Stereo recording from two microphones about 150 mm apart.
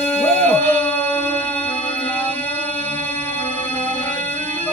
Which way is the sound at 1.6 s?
10° left (ahead or behind).